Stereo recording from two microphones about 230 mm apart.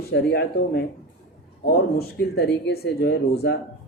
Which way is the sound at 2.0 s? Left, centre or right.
Left.